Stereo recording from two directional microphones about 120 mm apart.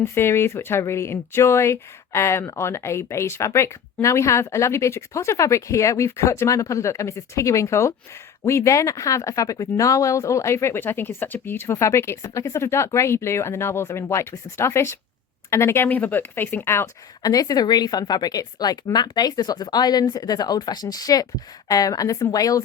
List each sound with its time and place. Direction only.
0.0 s speech: 20° left (ahead or behind)
17.2 s speech: 30° left (ahead or behind)